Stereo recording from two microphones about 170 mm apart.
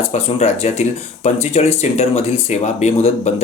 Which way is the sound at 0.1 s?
40° left (ahead or behind).